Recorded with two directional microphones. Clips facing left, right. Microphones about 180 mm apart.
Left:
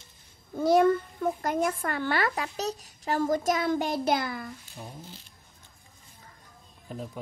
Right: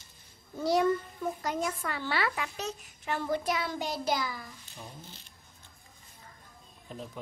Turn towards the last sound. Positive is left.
turn(degrees=10)  # may be behind; listen again after turning